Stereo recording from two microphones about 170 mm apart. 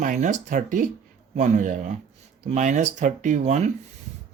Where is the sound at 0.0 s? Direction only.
50° right (ahead or behind).